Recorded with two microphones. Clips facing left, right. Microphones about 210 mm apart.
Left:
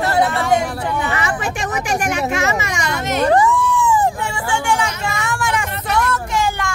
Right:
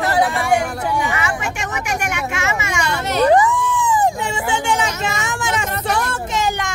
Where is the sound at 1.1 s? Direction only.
35° left (ahead or behind).